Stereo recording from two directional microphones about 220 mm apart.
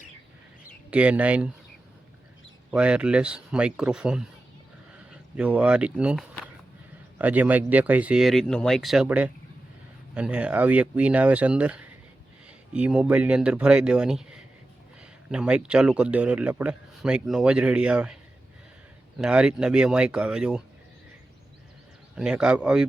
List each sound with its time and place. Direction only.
0.9 s a man's voice: 5° right (ahead or behind)
2.7 s a man's voice: 5° right (ahead or behind)
5.4 s a man's voice: 5° right (ahead or behind)
19.2 s a man's voice: 5° right (ahead or behind)
22.1 s a man's voice: 5° right (ahead or behind)